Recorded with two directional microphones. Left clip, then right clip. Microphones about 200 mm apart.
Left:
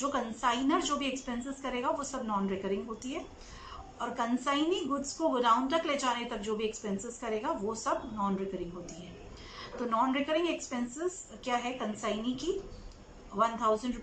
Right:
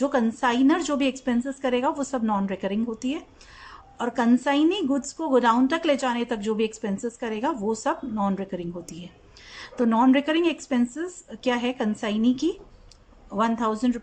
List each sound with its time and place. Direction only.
0.1 s a woman's voice: 55° right (ahead or behind)